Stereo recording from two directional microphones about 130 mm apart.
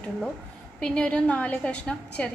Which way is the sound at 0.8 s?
10° left (ahead or behind).